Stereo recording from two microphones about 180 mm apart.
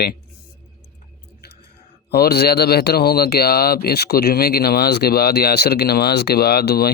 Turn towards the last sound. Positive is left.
turn(degrees=60)  # may be behind; listen again after turning